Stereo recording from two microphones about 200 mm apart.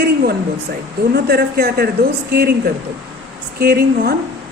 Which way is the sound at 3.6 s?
50° right (ahead or behind).